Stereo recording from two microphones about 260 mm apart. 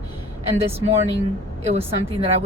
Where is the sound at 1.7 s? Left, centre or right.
Right.